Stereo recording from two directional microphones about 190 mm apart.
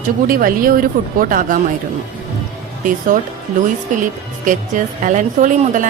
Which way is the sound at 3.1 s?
45° right (ahead or behind).